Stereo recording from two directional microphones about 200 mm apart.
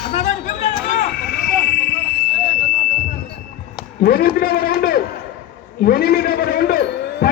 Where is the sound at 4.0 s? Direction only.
50° left (ahead or behind).